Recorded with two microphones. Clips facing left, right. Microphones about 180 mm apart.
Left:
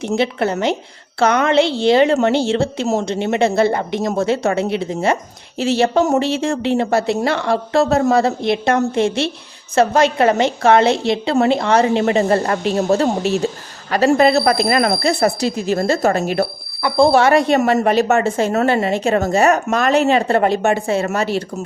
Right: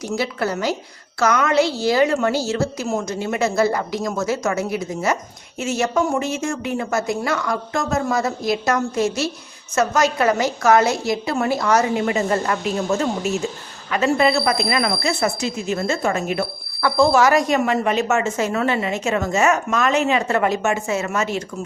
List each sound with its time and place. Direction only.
0.2 s a woman's voice: 25° left (ahead or behind)
17.6 s speech: 40° left (ahead or behind)
18.5 s speech: 40° left (ahead or behind)